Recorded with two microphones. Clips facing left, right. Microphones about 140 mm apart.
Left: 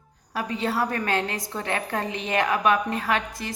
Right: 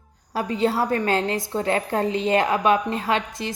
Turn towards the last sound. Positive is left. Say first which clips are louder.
# right 2 dB
turn(degrees=-25)  # may be behind; listen again after turning